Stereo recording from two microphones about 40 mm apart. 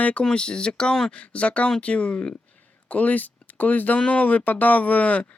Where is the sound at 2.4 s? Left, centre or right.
Left.